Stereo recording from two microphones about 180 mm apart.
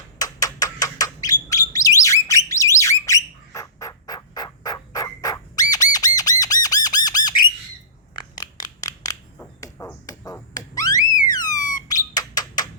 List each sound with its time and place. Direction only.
0.2 s bird: 20° left (ahead or behind)
5.7 s squawk: 20° left (ahead or behind)
8.1 s crushing: 20° left (ahead or behind)
9.6 s a sound: 20° left (ahead or behind)
11.5 s squawk: 20° left (ahead or behind)